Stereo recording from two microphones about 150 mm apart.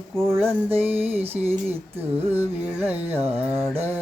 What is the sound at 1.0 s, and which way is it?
Music, 40° right (ahead or behind).